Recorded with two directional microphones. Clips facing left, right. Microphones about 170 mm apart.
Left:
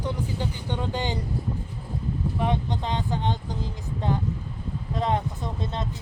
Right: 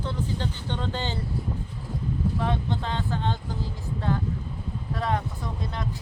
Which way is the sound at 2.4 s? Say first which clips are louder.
Left 1 dB; 15° left (ahead or behind).